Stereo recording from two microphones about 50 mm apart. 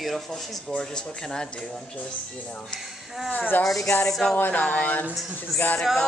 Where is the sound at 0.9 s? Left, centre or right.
Centre.